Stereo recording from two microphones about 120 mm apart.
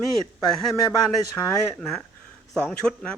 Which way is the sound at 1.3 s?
5° left (ahead or behind).